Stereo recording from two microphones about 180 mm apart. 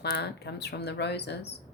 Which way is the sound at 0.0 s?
65° left (ahead or behind).